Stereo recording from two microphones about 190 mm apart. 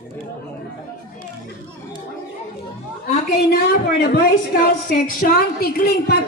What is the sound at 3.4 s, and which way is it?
A woman's voice, 55° left (ahead or behind).